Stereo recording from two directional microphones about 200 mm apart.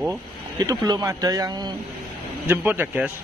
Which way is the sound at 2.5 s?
10° right (ahead or behind).